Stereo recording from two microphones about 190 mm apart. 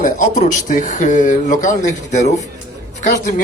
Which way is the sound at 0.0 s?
40° left (ahead or behind).